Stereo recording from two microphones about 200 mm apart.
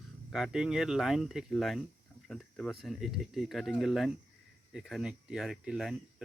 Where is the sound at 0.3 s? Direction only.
Centre (ahead or behind).